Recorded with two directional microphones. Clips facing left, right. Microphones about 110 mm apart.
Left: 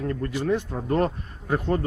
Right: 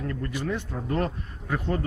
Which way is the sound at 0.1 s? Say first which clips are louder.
Left 7 dB; 35° left (ahead or behind).